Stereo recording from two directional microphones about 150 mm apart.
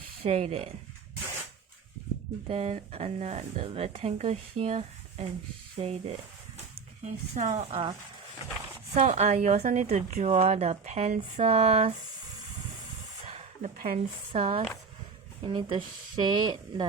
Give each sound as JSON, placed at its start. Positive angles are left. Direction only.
{"t": 0.2, "sound": "a woman's voice", "side_deg": -45}
{"t": 2.5, "sound": "a woman's voice", "side_deg": -45}
{"t": 9.0, "sound": "a woman's voice", "side_deg": -45}
{"t": 13.2, "sound": "a sound", "side_deg": -45}
{"t": 13.9, "sound": "a woman's voice", "side_deg": -45}
{"t": 15.4, "sound": "speech", "side_deg": -35}